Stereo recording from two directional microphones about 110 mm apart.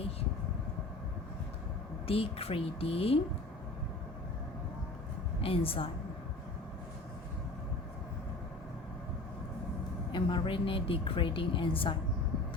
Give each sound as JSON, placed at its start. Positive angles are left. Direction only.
{"t": 2.0, "sound": "speech", "side_deg": 60}
{"t": 5.4, "sound": "speech", "side_deg": 60}
{"t": 10.1, "sound": "a woman's voice", "side_deg": 45}